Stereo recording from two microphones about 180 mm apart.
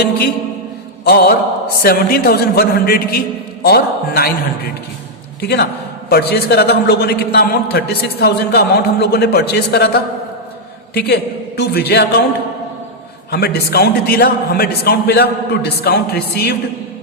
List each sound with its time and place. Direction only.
1.0 s a man's voice: 60° left (ahead or behind)
5.4 s a man's voice: 60° left (ahead or behind)
13.3 s a man's voice: 60° left (ahead or behind)